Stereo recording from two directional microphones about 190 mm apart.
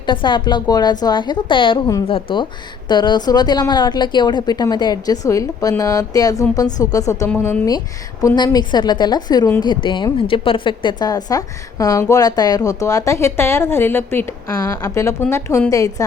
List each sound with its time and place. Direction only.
0.0 s a woman's voice: 25° left (ahead or behind)